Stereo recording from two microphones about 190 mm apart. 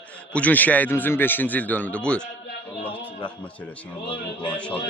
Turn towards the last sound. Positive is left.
turn(degrees=25)  # may be behind; listen again after turning